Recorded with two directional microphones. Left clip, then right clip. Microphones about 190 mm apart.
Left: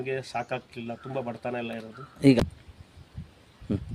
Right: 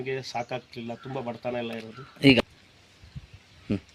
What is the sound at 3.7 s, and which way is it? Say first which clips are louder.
Speech: right 1 dB; 10° left (ahead or behind).